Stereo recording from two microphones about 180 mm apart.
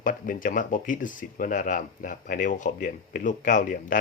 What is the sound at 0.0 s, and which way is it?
Speech, 50° left (ahead or behind).